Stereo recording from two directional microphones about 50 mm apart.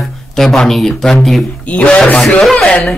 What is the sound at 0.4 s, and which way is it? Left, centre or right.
Speech, centre.